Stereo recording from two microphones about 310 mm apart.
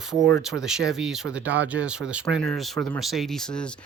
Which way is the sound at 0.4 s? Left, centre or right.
Centre.